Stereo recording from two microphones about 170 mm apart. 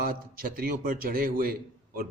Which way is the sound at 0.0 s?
60° right (ahead or behind).